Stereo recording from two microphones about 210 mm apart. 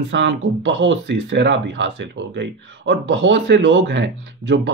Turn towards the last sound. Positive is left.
turn(degrees=-60)  # may be behind; listen again after turning